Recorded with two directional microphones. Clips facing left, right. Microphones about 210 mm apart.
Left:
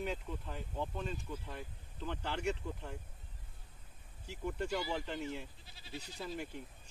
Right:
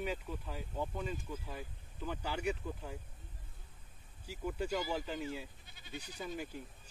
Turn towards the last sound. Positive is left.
turn(degrees=-5)  # may be behind; listen again after turning